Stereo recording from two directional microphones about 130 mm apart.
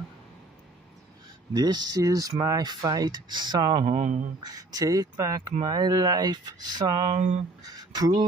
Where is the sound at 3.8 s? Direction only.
60° right (ahead or behind).